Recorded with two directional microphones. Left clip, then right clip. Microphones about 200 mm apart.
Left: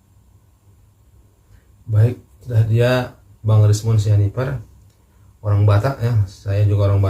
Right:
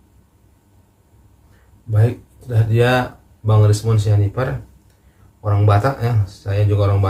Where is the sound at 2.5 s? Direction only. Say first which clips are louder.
Right 2 dB; 5° right (ahead or behind).